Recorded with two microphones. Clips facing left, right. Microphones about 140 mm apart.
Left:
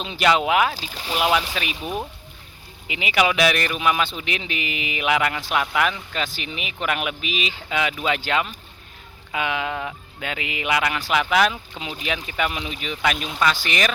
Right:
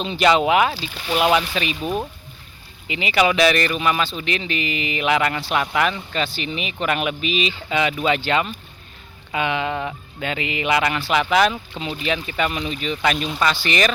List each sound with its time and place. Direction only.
0.0 s speech: 5° left (ahead or behind)
0.7 s speech: 40° left (ahead or behind)
1.2 s speech: 5° left (ahead or behind)